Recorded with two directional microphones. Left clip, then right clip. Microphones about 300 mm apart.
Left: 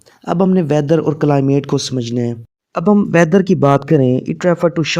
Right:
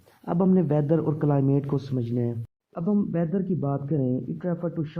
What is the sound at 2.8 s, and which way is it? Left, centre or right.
Speech, left.